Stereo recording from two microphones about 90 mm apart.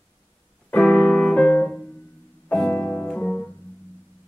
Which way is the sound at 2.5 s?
15° left (ahead or behind).